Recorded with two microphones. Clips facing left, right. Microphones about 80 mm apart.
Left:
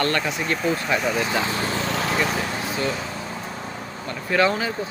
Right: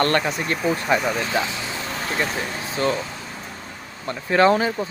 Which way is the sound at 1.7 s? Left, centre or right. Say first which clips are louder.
Left 4 dB; left.